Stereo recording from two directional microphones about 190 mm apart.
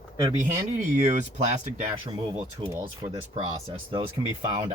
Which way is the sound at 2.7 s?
20° right (ahead or behind).